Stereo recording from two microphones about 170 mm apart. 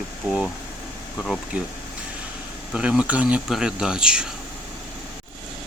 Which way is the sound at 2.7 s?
5° right (ahead or behind).